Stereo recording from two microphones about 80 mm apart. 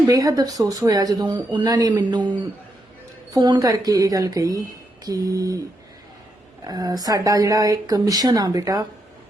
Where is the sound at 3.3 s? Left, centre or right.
Right.